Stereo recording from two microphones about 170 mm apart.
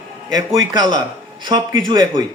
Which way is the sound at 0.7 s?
25° right (ahead or behind).